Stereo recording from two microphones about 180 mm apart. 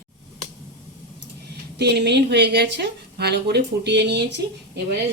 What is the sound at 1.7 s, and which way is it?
Speech, 70° right (ahead or behind).